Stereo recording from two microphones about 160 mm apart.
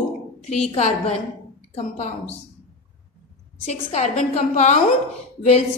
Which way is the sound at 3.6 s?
45° left (ahead or behind).